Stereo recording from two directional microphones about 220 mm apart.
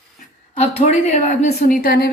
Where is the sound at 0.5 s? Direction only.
30° left (ahead or behind).